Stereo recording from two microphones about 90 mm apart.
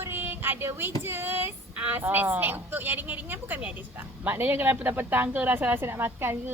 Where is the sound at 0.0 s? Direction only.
25° right (ahead or behind).